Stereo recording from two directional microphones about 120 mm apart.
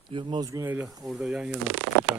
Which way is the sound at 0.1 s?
45° right (ahead or behind).